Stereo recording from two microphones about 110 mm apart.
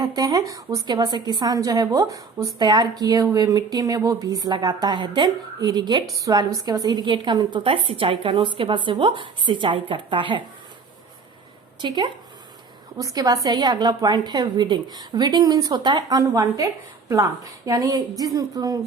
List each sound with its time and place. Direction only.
0.0 s a woman's voice: 35° right (ahead or behind)
2.6 s a woman's voice: 40° right (ahead or behind)
11.8 s a woman's voice: 45° right (ahead or behind)
13.0 s a woman's voice: 30° right (ahead or behind)